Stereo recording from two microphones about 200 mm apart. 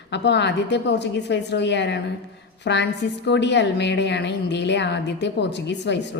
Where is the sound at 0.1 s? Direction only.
60° left (ahead or behind).